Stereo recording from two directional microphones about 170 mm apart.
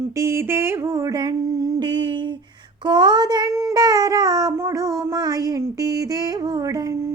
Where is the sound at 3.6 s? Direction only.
20° right (ahead or behind).